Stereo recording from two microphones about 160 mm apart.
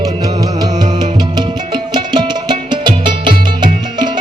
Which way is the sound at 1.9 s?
30° right (ahead or behind).